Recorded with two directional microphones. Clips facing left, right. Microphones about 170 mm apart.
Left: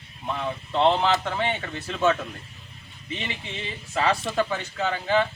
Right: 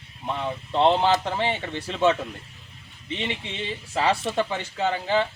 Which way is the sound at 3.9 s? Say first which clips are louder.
Right 1 dB; 30° right (ahead or behind).